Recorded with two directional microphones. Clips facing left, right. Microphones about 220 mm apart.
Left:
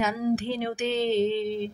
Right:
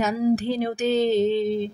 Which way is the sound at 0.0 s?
40° right (ahead or behind).